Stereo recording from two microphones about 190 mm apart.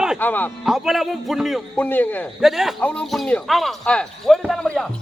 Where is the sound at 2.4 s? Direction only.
Centre (ahead or behind).